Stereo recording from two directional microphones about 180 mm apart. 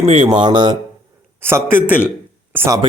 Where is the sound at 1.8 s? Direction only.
10° left (ahead or behind).